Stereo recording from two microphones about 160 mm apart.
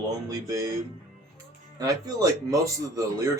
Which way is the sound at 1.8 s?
20° right (ahead or behind).